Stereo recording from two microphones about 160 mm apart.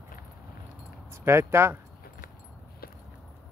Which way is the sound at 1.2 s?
15° right (ahead or behind).